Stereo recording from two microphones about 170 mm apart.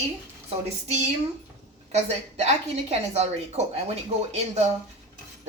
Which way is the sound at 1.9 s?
40° right (ahead or behind).